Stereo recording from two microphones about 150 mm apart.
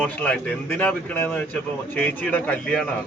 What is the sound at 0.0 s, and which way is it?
A man's voice, 10° left (ahead or behind).